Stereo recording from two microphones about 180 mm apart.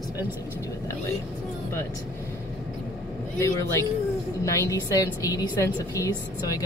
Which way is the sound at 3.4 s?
15° left (ahead or behind).